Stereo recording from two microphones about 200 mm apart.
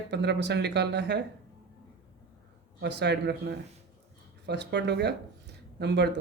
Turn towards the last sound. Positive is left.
turn(degrees=-60)  # may be behind; listen again after turning